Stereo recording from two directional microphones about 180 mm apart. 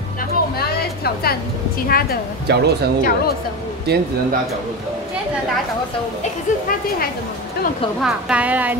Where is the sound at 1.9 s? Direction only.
55° left (ahead or behind).